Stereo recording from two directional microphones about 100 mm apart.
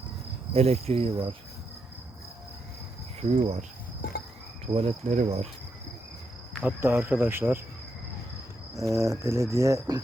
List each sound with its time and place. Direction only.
0.5 s cricket: 90° right; by 1.4 s 70° right (ahead or behind)
3.2 s cricket: 90° right
4.6 s cricket: 75° right (ahead or behind); by 5.5 s 90° right
6.6 s speech: 20° right (ahead or behind)
8.7 s cricket: 30° right (ahead or behind)